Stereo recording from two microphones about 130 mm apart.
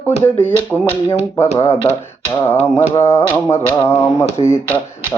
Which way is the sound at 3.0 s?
15° left (ahead or behind).